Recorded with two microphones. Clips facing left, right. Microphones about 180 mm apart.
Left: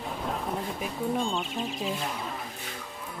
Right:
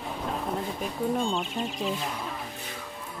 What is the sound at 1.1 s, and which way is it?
Speech, centre (ahead or behind).